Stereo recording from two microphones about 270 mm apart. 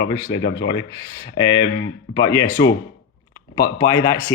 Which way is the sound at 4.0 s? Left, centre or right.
Centre.